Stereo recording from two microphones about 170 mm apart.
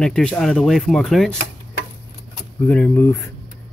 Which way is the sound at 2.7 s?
10° left (ahead or behind).